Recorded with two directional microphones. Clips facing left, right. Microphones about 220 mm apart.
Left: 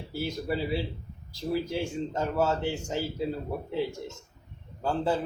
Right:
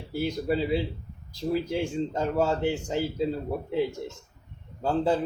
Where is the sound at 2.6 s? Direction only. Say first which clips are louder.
Right 4 dB; 15° right (ahead or behind).